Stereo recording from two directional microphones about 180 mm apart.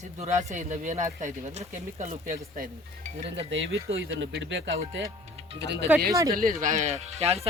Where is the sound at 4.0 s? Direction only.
90° right.